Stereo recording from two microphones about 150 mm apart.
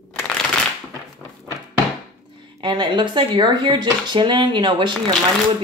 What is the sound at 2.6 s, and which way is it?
Speech, 30° right (ahead or behind).